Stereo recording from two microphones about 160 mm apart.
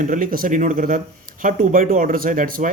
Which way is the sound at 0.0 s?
55° right (ahead or behind).